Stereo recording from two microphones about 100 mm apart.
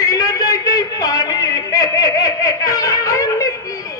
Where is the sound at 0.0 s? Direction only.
35° left (ahead or behind).